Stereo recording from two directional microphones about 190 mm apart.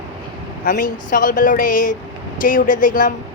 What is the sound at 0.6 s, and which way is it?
A woman's voice, 45° left (ahead or behind).